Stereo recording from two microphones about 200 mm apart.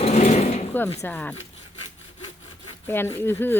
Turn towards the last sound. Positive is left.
turn(degrees=10)  # may be behind; listen again after turning